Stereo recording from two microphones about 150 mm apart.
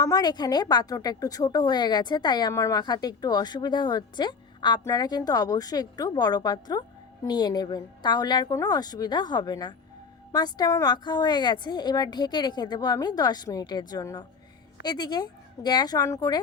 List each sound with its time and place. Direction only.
0.0 s a woman's voice: 25° left (ahead or behind)